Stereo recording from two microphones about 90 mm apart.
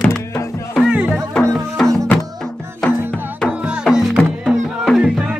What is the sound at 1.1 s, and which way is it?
Music, 5° left (ahead or behind).